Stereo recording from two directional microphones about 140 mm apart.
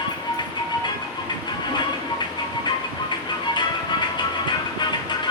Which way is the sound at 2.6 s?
30° left (ahead or behind).